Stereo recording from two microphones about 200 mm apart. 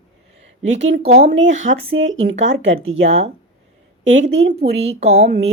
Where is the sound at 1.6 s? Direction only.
75° right (ahead or behind).